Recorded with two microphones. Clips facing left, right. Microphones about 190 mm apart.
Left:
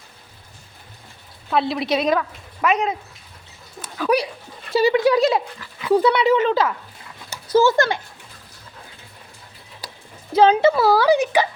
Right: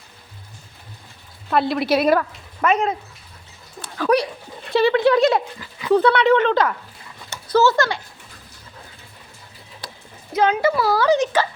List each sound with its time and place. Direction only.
1.5 s speech: centre (ahead or behind)
3.9 s a sound: 10° left (ahead or behind)
4.7 s speech: 10° left (ahead or behind)
10.3 s speech: 30° left (ahead or behind)
10.9 s speech: 10° left (ahead or behind)